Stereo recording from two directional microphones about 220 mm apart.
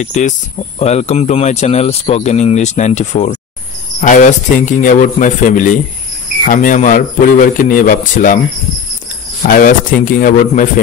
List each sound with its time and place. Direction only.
0.0 s speech: 35° left (ahead or behind)
9.5 s speech: 40° left (ahead or behind)